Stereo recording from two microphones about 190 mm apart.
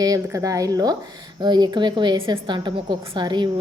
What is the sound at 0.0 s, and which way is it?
A woman's voice, 20° right (ahead or behind).